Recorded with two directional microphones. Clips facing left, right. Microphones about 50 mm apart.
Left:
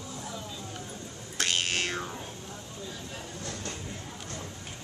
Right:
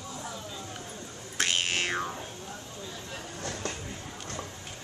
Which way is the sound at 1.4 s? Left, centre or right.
Right.